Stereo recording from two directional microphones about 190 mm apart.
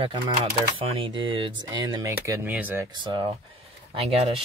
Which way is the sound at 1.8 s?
15° right (ahead or behind).